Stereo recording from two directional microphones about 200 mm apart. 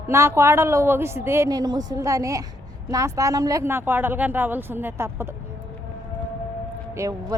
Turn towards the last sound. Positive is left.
turn(degrees=-15)  # may be behind; listen again after turning